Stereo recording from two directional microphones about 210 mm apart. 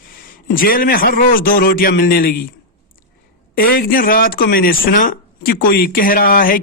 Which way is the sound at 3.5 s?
45° left (ahead or behind).